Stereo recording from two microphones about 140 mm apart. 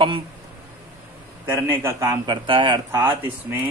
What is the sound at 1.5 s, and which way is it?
Speech, 15° right (ahead or behind).